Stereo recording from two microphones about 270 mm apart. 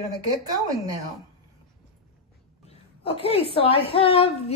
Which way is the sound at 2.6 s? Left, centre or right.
Left.